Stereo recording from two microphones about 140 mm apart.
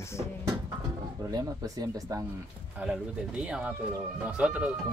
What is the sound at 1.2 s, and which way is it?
Speech, 25° right (ahead or behind).